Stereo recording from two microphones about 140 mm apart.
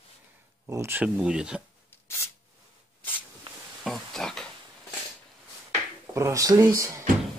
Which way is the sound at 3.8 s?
Centre (ahead or behind).